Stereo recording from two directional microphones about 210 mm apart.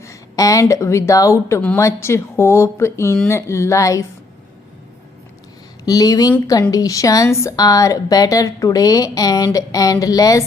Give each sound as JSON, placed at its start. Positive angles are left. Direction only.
{"t": 0.0, "sound": "a woman's voice", "side_deg": 15}
{"t": 5.8, "sound": "a woman's voice", "side_deg": 15}